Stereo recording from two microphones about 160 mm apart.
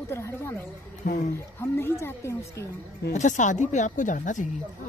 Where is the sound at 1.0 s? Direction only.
55° left (ahead or behind).